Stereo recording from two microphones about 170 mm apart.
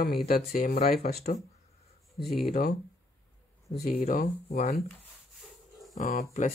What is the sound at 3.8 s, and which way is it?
Speech, 55° left (ahead or behind).